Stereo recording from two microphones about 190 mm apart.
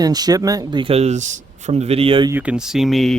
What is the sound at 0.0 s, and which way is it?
Speech, 20° right (ahead or behind).